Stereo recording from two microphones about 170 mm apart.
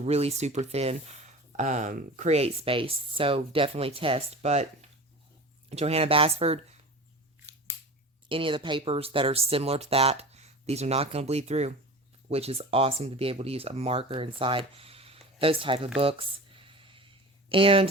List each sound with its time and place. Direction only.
0.0 s speech: 40° right (ahead or behind)
8.3 s speech: 30° right (ahead or behind)
16.0 s a sound: 35° right (ahead or behind)
17.5 s speech: 30° right (ahead or behind)